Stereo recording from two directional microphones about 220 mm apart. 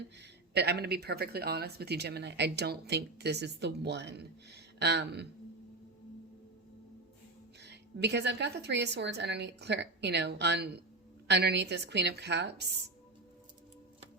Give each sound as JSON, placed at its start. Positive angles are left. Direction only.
{"t": 0.2, "sound": "speech", "side_deg": -50}
{"t": 7.6, "sound": "speech", "side_deg": -50}